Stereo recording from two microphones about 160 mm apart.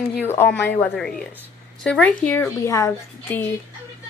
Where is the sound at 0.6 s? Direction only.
10° left (ahead or behind).